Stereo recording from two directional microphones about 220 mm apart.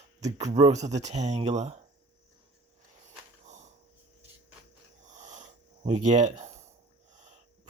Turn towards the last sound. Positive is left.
turn(degrees=-30)  # may be behind; listen again after turning